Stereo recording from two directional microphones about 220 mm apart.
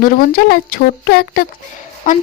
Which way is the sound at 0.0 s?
40° left (ahead or behind).